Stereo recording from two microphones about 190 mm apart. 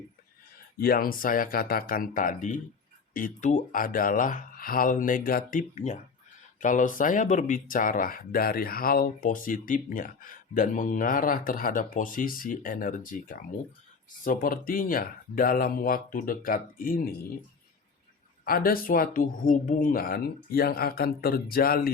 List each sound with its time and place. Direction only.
0.8 s speech: 50° left (ahead or behind)
18.4 s speech: 50° left (ahead or behind)